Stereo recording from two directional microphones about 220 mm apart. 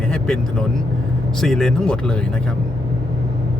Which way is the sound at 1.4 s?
Centre (ahead or behind).